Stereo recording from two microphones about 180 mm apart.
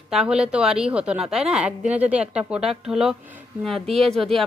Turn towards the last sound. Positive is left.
turn(degrees=0)  # may be behind; listen again after turning